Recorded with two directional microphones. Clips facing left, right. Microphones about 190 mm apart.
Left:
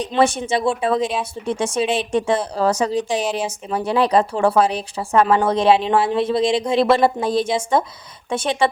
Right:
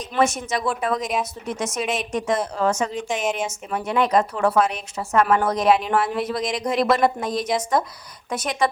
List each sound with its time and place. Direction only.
0.0 s speech: 30° left (ahead or behind)